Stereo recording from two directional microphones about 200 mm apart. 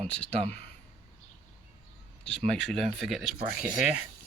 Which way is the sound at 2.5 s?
Centre (ahead or behind).